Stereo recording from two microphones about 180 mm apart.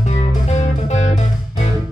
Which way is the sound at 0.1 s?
40° left (ahead or behind).